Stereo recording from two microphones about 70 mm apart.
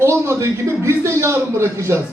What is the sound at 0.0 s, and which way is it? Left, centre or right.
A man's voice, right.